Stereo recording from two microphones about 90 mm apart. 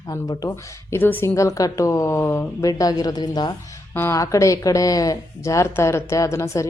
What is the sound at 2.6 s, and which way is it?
Speech, 40° left (ahead or behind).